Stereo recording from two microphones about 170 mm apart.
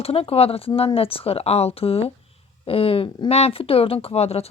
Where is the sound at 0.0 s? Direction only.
35° left (ahead or behind).